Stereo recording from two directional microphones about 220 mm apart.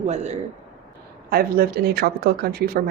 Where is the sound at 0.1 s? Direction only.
30° right (ahead or behind).